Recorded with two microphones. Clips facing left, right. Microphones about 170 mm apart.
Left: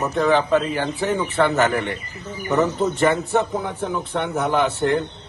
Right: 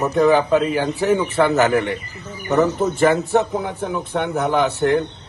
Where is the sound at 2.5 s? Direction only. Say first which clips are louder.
Right 3 dB; 15° right (ahead or behind).